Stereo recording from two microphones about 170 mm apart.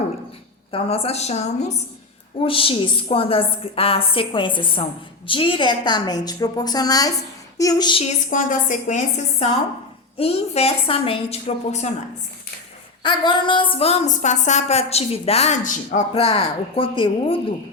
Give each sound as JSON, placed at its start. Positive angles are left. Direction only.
{"t": 0.7, "sound": "a woman's voice", "side_deg": 35}
{"t": 7.6, "sound": "a sound", "side_deg": 20}
{"t": 8.3, "sound": "a woman's voice", "side_deg": 50}
{"t": 10.2, "sound": "a woman's voice", "side_deg": 35}
{"t": 13.0, "sound": "a woman's voice", "side_deg": 25}